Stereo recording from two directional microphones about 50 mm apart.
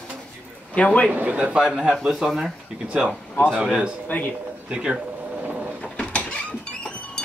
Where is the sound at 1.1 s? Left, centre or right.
Right.